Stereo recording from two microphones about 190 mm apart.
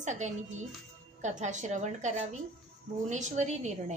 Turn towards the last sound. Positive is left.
turn(degrees=-40)  # may be behind; listen again after turning